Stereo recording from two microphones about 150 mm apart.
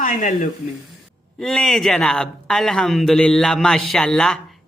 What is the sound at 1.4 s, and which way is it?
Speech, centre (ahead or behind).